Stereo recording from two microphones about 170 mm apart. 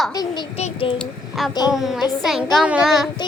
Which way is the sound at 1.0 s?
Centre (ahead or behind).